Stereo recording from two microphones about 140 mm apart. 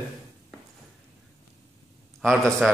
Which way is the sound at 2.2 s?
5° left (ahead or behind).